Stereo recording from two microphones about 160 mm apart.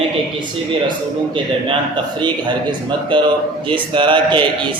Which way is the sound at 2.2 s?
30° right (ahead or behind).